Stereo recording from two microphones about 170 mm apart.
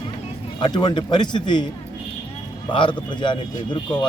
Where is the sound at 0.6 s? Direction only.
25° left (ahead or behind).